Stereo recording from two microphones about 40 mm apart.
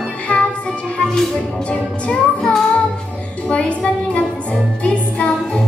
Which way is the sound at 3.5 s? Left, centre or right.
Left.